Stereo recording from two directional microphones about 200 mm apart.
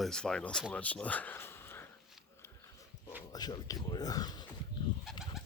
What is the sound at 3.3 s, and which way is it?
Speech, 20° left (ahead or behind).